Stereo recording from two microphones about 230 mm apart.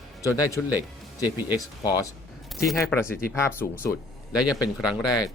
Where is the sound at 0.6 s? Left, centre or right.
Centre.